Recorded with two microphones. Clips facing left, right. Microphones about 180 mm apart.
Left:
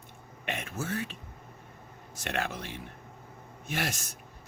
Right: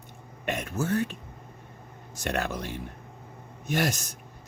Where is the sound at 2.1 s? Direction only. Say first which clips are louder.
Right 4 dB; 45° right (ahead or behind).